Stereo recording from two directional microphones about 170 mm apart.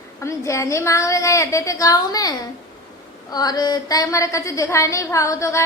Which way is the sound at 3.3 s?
25° left (ahead or behind).